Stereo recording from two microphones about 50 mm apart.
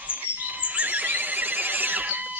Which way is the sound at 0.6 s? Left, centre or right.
Right.